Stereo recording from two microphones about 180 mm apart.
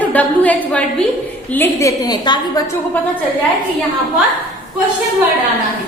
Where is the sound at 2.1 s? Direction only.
25° left (ahead or behind).